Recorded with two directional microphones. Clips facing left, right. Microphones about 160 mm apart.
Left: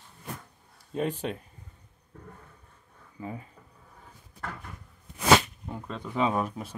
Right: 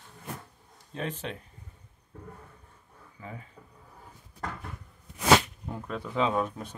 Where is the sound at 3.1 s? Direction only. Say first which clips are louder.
Left 5 dB; 30° left (ahead or behind).